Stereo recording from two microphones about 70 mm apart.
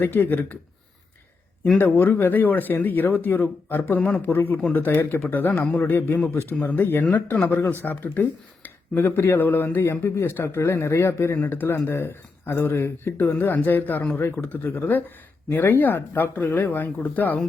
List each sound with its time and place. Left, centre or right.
0.0 s speech: left
1.8 s speech: left
13.1 s speech: left